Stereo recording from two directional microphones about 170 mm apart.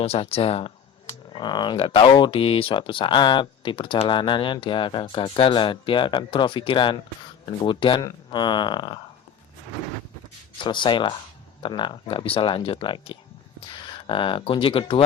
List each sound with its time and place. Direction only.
0.0 s speech: 35° left (ahead or behind)
10.6 s speech: 30° left (ahead or behind)